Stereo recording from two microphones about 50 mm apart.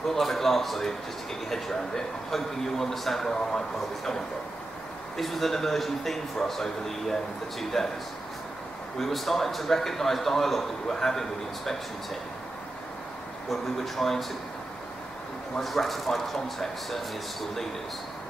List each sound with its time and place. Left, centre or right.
0.1 s a man's voice: centre
8.9 s a man's voice: centre
13.5 s a man's voice: centre
15.6 s a man's voice: centre